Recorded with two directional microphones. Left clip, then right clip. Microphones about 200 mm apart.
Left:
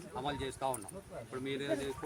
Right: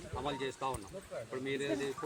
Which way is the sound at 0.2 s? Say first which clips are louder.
Even; 20° left (ahead or behind).